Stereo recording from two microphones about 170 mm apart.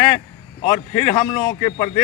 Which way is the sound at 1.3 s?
35° left (ahead or behind).